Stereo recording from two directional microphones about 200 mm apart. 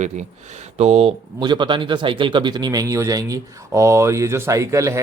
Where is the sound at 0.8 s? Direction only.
30° right (ahead or behind).